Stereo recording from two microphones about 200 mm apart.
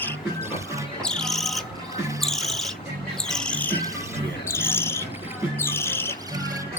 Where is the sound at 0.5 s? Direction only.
15° right (ahead or behind).